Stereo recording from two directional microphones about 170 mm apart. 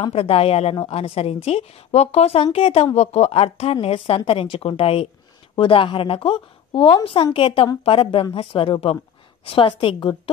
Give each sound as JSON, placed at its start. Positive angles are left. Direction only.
{"t": 0.0, "sound": "a woman's voice", "side_deg": 35}